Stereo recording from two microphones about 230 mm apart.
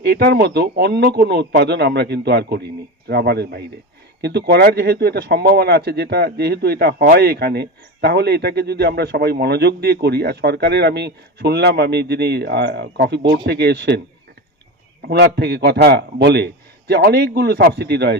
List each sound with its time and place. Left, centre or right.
0.0 s speech: right
15.0 s speech: right